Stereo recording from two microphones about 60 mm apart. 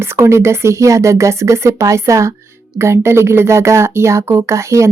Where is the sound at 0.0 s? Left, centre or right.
Right.